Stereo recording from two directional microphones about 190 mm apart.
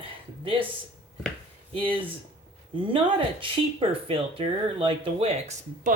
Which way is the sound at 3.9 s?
30° right (ahead or behind).